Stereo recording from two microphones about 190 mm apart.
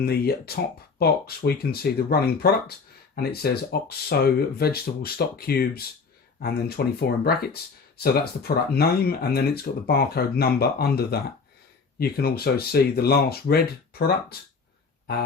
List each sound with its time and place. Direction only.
0.0 s speech: 55° left (ahead or behind)